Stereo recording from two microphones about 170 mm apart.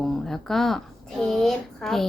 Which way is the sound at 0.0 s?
Centre (ahead or behind).